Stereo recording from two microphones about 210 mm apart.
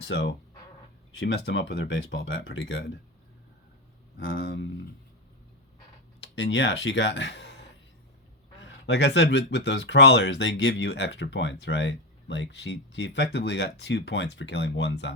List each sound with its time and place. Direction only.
0.0 s speech: 55° left (ahead or behind)
4.2 s speech: 60° left (ahead or behind)
6.1 s speech: 55° left (ahead or behind)
8.6 s speech: 55° left (ahead or behind)